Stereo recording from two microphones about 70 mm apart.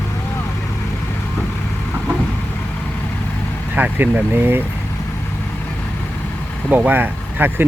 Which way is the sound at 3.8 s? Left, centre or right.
Right.